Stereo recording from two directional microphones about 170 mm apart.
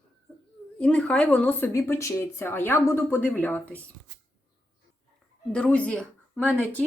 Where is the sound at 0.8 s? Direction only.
5° left (ahead or behind).